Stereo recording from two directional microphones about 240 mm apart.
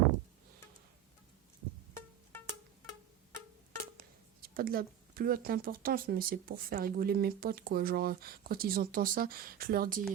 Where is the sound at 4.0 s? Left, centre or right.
Right.